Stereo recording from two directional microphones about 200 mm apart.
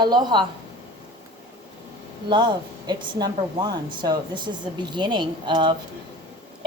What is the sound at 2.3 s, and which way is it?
Speech, 25° right (ahead or behind).